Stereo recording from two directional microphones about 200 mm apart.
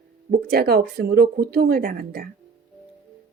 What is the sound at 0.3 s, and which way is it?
A woman's voice, 50° right (ahead or behind).